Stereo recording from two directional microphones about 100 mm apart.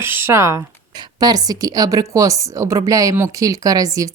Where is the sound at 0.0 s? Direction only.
25° right (ahead or behind).